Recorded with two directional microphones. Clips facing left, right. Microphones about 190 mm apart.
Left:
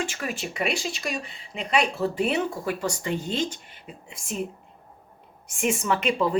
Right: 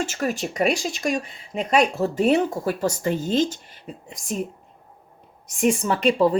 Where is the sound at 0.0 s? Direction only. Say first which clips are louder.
Right 5 dB; 40° right (ahead or behind).